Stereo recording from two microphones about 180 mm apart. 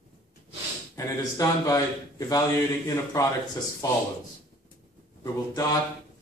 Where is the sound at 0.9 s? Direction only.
20° left (ahead or behind).